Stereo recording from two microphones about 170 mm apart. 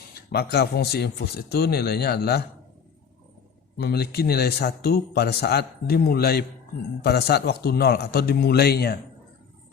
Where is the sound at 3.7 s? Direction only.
70° left (ahead or behind).